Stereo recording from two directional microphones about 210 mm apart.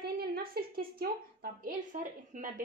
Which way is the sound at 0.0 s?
45° right (ahead or behind).